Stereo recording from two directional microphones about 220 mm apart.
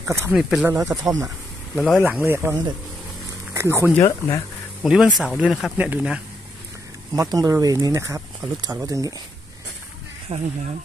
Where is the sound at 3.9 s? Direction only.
15° left (ahead or behind).